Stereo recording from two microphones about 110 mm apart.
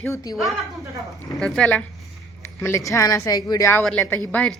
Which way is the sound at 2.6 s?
25° left (ahead or behind).